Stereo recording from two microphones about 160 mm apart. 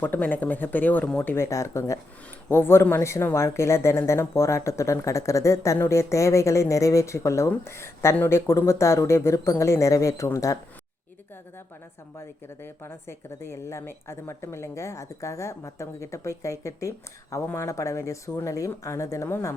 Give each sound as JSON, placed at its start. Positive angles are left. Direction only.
{"t": 0.0, "sound": "speech", "side_deg": 10}
{"t": 12.2, "sound": "speech", "side_deg": 15}